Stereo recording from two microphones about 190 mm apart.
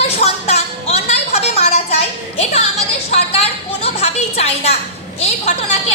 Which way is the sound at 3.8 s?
35° left (ahead or behind).